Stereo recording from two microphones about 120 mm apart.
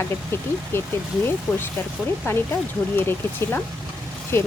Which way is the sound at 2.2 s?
20° left (ahead or behind).